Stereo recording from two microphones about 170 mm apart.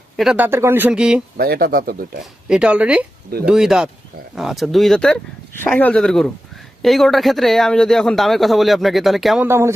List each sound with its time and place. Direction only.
0.2 s speech: 5° right (ahead or behind)
1.4 s speech: 65° right (ahead or behind)
2.5 s speech: 5° right (ahead or behind)
9.5 s speech: 15° right (ahead or behind)